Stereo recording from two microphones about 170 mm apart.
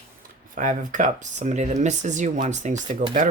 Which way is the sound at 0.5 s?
50° right (ahead or behind).